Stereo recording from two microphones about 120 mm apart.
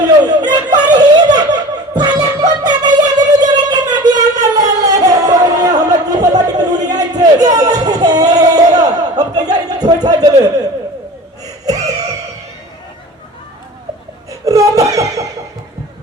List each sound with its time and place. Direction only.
0.3 s snicker: 35° right (ahead or behind)
3.4 s music: 35° right (ahead or behind)
6.8 s a sound: 30° right (ahead or behind)
11.6 s gasp: 30° right (ahead or behind)
14.3 s laughter: 25° right (ahead or behind)